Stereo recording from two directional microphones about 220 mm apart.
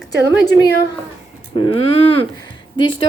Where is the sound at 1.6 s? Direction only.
25° left (ahead or behind).